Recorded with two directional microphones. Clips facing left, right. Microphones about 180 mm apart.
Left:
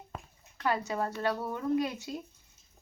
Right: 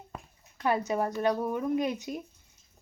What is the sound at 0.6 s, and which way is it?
Speech, 20° right (ahead or behind).